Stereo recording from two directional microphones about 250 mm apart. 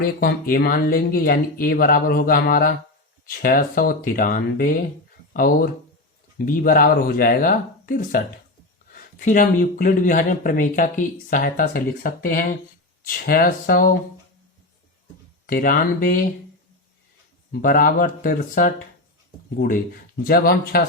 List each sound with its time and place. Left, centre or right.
0.0 s speech: left
15.4 s speech: left
17.5 s speech: left